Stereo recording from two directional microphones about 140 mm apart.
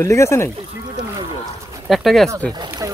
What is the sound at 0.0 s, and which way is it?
Speech, 20° left (ahead or behind).